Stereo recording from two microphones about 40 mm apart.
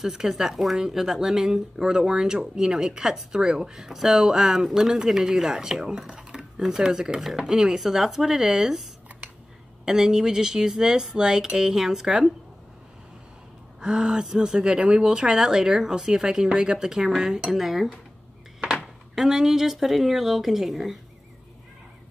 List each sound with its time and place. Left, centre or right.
0.0 s speech: centre
7.2 s speech: centre
9.8 s speech: centre
13.7 s speech: right; by 17.9 s centre
19.1 s speech: centre